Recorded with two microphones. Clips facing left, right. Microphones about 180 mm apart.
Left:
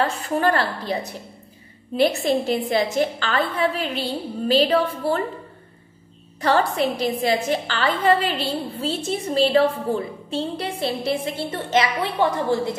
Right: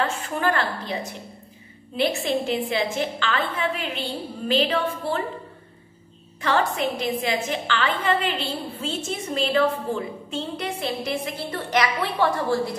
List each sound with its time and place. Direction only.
0.0 s a sound: 35° left (ahead or behind)
2.0 s a woman's voice: 40° left (ahead or behind)
6.4 s a woman's voice: 35° left (ahead or behind); by 12.7 s 20° left (ahead or behind)